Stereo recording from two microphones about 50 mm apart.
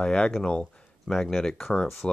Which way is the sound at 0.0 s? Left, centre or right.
Centre.